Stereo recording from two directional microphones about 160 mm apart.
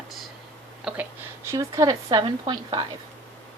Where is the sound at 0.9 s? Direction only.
5° right (ahead or behind).